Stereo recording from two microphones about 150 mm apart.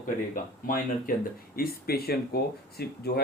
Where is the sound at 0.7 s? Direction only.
70° left (ahead or behind).